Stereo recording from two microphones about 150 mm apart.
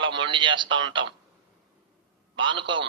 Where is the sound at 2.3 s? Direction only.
35° right (ahead or behind).